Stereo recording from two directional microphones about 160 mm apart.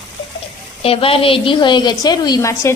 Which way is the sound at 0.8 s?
35° left (ahead or behind).